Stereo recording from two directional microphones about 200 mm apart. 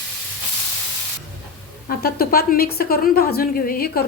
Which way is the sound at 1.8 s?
50° left (ahead or behind).